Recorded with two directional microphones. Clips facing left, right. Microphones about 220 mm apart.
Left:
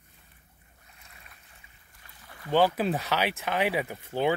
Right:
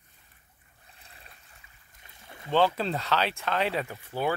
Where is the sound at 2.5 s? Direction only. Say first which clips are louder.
Left 1 dB; 10° left (ahead or behind).